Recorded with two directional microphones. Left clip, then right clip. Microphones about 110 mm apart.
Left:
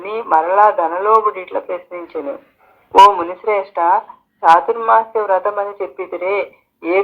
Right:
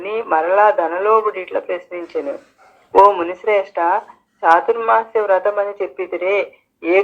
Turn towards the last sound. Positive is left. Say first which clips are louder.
# right 1 dB
turn(degrees=25)  # may be behind; listen again after turning